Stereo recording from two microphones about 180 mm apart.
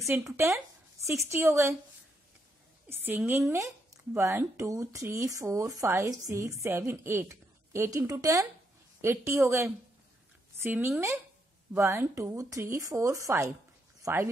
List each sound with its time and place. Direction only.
1.0 s a woman's voice: 15° right (ahead or behind)
2.9 s a woman's voice: 10° right (ahead or behind)